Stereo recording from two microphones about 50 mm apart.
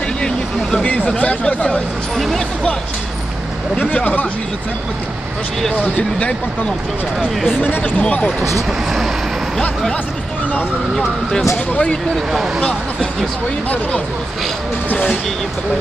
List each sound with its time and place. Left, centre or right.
0.2 s vehicle: centre
0.9 s speech: left
2.1 s speech: centre
3.8 s speech: left
5.8 s speech: left
7.5 s speech: left
7.8 s speech: left
11.7 s speech: left
12.3 s speech: centre
14.8 s speech: left